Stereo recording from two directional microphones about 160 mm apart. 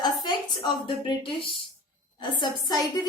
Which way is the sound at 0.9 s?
35° left (ahead or behind).